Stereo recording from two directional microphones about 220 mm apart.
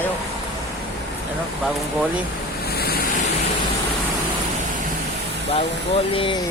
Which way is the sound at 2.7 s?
45° left (ahead or behind).